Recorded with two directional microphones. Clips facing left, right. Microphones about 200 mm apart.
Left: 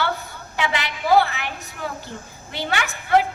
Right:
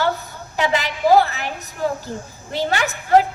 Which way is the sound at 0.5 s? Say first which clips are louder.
Right 5 dB; 40° right (ahead or behind).